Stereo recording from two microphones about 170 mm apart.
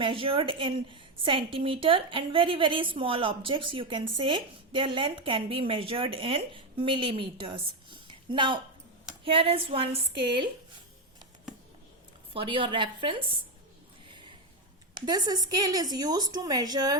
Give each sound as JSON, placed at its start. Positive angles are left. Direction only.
{"t": 0.0, "sound": "a woman's voice", "side_deg": -30}
{"t": 12.3, "sound": "a woman's voice", "side_deg": -30}
{"t": 14.1, "sound": "a sound", "side_deg": -30}
{"t": 14.9, "sound": "a woman's voice", "side_deg": -25}